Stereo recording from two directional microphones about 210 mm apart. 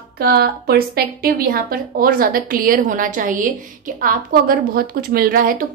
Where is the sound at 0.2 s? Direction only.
45° right (ahead or behind).